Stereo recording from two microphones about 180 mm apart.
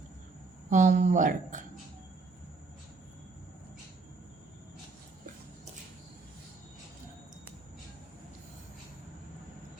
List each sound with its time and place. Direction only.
0.7 s speech: 45° right (ahead or behind)